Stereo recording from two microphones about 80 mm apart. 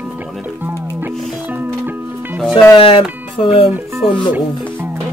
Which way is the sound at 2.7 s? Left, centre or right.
Left.